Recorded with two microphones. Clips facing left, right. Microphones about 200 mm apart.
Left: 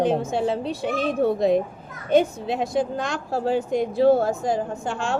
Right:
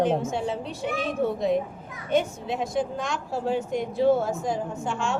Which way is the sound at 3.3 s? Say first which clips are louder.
Left 4 dB; 90° left.